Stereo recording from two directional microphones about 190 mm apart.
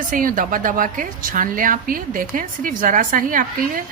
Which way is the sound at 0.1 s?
45° right (ahead or behind).